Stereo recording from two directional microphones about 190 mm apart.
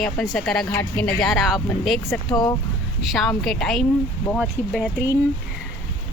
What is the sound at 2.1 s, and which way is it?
Speech, 20° left (ahead or behind).